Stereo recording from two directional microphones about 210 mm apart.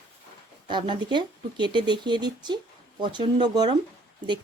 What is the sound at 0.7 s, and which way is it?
Speech, 20° right (ahead or behind).